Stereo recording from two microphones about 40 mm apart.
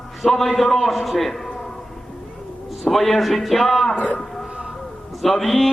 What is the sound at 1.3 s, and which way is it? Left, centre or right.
Speech, centre.